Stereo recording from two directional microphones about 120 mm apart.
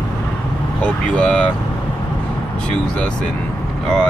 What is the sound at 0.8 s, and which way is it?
Speech, 10° left (ahead or behind).